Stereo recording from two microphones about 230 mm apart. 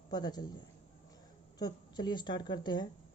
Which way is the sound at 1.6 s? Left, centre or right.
Centre.